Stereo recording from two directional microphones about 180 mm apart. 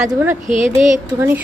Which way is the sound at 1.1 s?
15° right (ahead or behind).